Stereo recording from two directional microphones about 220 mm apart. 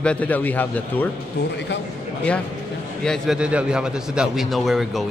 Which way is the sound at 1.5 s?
50° left (ahead or behind).